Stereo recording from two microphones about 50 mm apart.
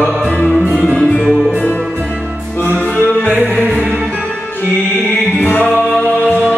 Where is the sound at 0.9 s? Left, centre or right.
Centre.